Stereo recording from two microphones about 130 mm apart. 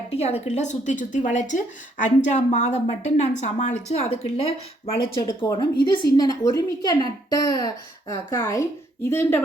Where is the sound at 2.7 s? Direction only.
55° left (ahead or behind).